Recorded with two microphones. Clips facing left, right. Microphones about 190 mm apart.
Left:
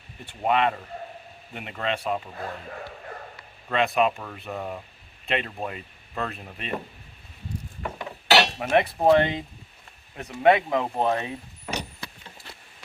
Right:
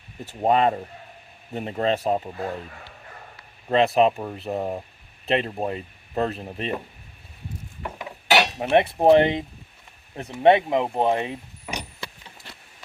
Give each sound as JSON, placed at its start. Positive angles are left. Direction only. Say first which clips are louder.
{"t": 0.3, "sound": "speech", "louder": "right 4 dB", "side_deg": -40}
{"t": 3.7, "sound": "speech", "louder": "right 5 dB", "side_deg": -35}
{"t": 7.8, "sound": "mechanisms", "louder": "right 1 dB", "side_deg": -5}
{"t": 8.7, "sound": "speech", "louder": "right 3 dB", "side_deg": -25}
{"t": 11.6, "sound": "vehicle", "louder": "left 3 dB", "side_deg": -10}